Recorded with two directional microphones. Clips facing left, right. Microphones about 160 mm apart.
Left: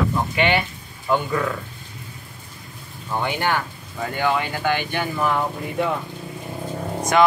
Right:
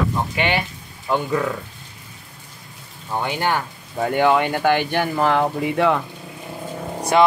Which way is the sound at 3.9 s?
55° right (ahead or behind).